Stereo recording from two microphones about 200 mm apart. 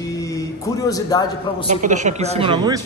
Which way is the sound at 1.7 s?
35° right (ahead or behind).